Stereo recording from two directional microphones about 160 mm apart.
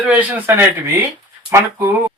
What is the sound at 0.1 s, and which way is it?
Speech, 10° right (ahead or behind).